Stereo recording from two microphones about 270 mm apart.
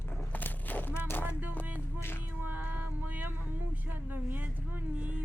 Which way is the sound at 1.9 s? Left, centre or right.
Centre.